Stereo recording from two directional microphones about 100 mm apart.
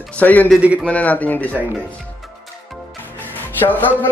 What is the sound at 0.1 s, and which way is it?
Speech, 15° left (ahead or behind).